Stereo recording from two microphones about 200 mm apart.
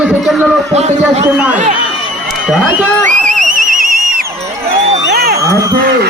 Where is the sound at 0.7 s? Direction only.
35° right (ahead or behind).